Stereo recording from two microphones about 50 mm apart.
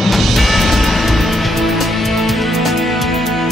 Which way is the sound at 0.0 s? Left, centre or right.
Centre.